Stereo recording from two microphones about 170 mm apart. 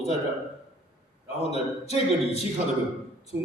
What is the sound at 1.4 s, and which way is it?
Speech, 35° left (ahead or behind).